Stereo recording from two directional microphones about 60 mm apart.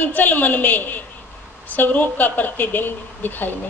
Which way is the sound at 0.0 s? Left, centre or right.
Left.